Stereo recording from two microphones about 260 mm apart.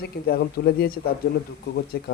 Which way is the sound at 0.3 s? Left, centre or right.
Left.